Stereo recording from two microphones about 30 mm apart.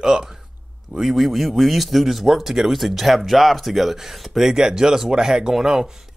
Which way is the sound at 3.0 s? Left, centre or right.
Centre.